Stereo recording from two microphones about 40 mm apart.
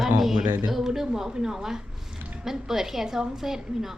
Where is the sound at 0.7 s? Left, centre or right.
Centre.